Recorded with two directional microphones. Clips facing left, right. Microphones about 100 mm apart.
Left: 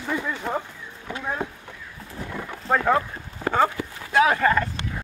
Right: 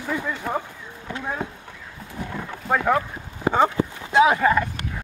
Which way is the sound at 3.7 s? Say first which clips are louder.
Right 3 dB; 20° right (ahead or behind).